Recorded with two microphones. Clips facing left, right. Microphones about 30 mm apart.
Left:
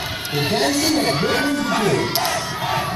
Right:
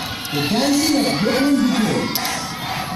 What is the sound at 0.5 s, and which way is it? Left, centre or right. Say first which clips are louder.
Speech: right 2 dB; left.